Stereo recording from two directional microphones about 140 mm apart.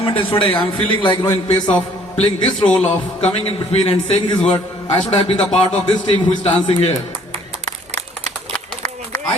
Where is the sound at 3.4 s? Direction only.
45° left (ahead or behind).